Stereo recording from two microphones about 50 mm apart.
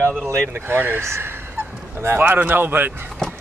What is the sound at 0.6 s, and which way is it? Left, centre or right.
Speech, right.